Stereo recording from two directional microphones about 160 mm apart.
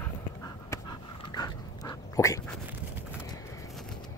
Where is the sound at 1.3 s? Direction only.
25° left (ahead or behind).